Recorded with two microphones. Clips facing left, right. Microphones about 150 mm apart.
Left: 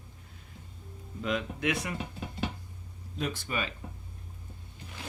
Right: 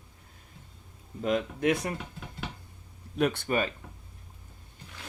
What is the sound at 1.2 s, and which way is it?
Speech, 40° right (ahead or behind).